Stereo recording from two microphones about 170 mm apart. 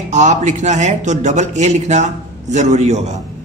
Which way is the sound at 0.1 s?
45° right (ahead or behind).